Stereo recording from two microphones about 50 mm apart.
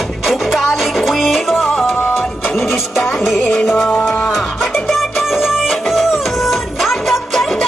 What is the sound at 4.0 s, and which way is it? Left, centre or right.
Music, left.